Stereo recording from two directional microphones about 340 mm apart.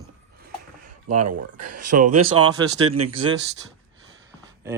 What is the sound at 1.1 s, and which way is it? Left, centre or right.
Speech, right.